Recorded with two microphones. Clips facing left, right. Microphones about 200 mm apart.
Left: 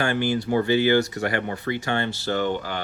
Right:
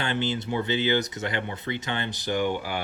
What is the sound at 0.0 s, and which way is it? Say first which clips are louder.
Speech: left 5 dB; 20° right (ahead or behind).